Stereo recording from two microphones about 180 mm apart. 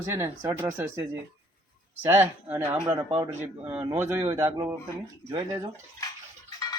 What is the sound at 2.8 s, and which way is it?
Speech, 25° right (ahead or behind).